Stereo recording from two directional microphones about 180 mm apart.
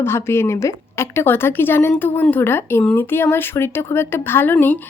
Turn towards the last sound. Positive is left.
turn(degrees=10)  # may be behind; listen again after turning